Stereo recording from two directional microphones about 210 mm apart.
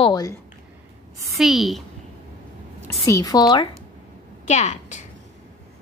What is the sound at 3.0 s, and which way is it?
Speech, 15° left (ahead or behind).